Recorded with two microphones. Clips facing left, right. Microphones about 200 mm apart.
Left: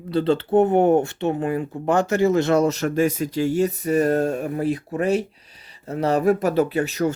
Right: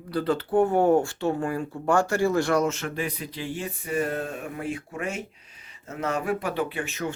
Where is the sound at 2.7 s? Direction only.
40° left (ahead or behind).